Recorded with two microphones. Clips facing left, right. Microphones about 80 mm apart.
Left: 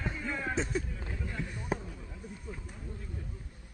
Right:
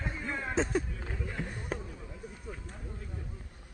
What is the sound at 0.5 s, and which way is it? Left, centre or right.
Speech, right.